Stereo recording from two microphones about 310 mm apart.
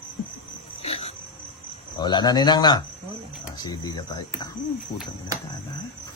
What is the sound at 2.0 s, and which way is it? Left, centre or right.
Speech, centre.